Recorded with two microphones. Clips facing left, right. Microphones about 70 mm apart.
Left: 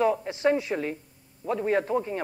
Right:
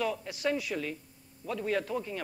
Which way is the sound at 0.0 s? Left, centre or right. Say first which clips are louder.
Left 8 dB; left.